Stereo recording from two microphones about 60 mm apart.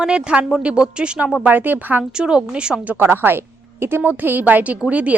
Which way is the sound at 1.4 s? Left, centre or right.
Right.